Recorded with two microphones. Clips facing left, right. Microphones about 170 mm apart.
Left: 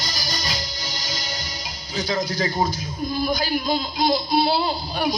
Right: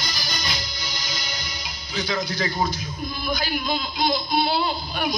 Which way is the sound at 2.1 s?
40° left (ahead or behind).